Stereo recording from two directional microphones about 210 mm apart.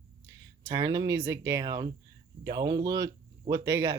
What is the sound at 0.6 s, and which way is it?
Speech, 15° right (ahead or behind).